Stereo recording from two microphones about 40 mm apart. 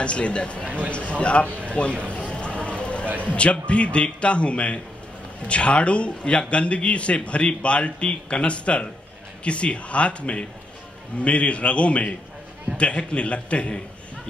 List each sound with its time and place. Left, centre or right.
0.0 s a man's voice: left
0.7 s speech: right
1.2 s a man's voice: left
2.0 s clip-clop: left
3.1 s a sound: right
3.3 s a man's voice: left